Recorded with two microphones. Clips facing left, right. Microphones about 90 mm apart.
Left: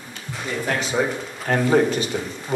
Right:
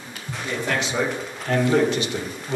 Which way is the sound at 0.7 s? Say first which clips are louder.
Left 2 dB; 40° left (ahead or behind).